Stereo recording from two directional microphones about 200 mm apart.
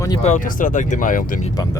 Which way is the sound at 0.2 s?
40° left (ahead or behind).